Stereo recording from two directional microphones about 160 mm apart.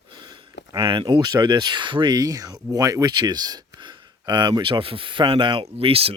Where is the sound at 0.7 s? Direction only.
30° right (ahead or behind).